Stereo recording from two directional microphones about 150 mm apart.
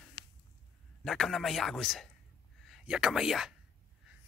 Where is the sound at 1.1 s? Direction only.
Centre (ahead or behind).